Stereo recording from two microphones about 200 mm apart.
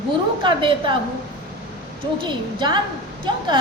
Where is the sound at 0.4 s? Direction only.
25° right (ahead or behind).